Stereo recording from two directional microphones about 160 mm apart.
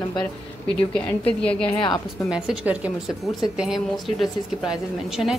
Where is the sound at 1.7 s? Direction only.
30° left (ahead or behind).